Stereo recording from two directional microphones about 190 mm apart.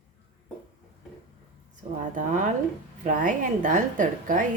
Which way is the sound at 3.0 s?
45° right (ahead or behind).